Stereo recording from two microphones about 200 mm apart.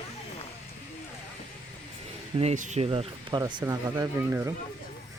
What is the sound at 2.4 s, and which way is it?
Speech, 35° right (ahead or behind).